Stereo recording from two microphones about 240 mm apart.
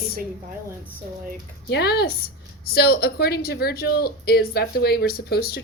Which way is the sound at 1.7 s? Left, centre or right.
Left.